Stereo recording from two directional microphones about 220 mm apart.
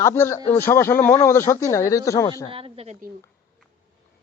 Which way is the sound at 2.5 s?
25° right (ahead or behind).